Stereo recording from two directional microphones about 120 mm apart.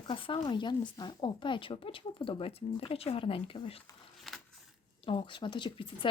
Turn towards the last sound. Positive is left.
turn(degrees=40)  # may be behind; listen again after turning